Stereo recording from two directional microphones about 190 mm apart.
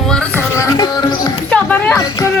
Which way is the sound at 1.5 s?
10° left (ahead or behind).